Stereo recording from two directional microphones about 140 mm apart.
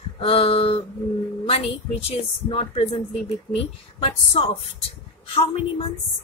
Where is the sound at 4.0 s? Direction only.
45° left (ahead or behind).